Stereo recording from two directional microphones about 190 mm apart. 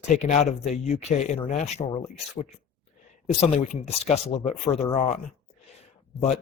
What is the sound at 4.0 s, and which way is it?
Speech, 35° left (ahead or behind).